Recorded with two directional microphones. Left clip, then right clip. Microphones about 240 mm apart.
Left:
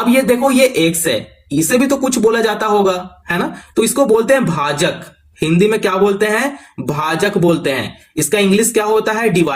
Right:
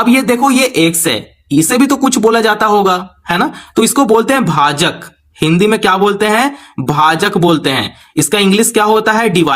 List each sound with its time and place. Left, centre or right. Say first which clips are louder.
0.0 s speech: right 2 dB; right